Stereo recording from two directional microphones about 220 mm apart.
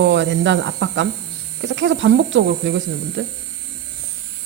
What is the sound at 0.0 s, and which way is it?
Speech, 55° right (ahead or behind).